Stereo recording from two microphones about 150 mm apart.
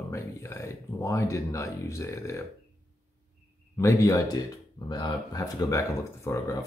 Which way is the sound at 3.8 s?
20° left (ahead or behind).